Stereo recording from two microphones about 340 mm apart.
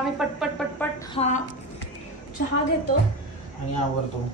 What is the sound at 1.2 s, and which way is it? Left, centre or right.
Speech, centre.